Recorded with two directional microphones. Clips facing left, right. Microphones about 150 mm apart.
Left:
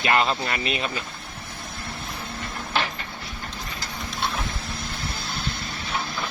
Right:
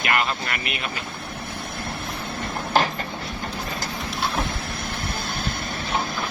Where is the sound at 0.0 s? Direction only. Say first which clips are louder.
Left 2 dB; 25° left (ahead or behind).